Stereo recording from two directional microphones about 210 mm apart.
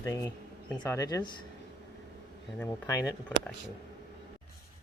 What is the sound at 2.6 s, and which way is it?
Speech, 15° left (ahead or behind).